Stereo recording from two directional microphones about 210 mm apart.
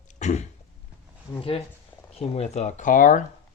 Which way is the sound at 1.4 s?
25° left (ahead or behind).